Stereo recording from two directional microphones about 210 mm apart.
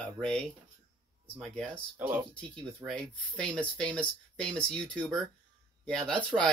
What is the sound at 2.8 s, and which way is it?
Speech, 5° left (ahead or behind).